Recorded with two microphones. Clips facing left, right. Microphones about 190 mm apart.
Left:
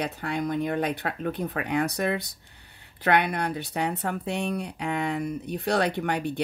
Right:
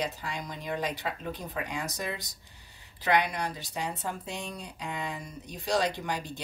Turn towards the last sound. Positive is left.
turn(degrees=60)  # may be behind; listen again after turning